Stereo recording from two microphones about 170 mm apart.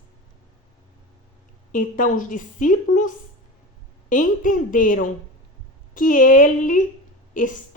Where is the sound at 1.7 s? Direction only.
50° left (ahead or behind).